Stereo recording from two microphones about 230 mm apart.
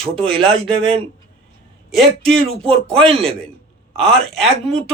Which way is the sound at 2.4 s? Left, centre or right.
Right.